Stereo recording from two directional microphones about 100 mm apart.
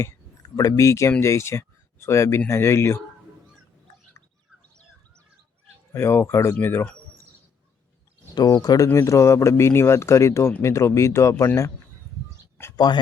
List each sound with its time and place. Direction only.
0.5 s speech: 35° left (ahead or behind)
5.9 s speech: 25° left (ahead or behind)
8.4 s speech: 40° left (ahead or behind)
8.9 s speech: 30° left (ahead or behind)
12.7 s speech: 45° left (ahead or behind)